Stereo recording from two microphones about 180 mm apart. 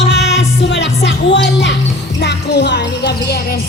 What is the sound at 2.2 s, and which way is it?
Music, 70° left (ahead or behind).